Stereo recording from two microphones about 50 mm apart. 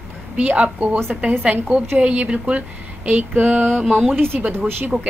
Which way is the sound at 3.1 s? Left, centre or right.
Right.